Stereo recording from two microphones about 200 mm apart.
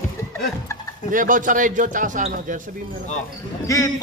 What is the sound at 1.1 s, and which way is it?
Speech, 40° right (ahead or behind).